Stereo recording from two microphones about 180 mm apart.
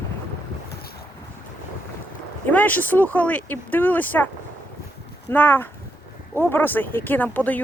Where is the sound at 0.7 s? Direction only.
60° left (ahead or behind).